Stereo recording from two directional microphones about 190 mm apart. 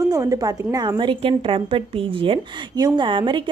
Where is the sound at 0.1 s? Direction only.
15° right (ahead or behind).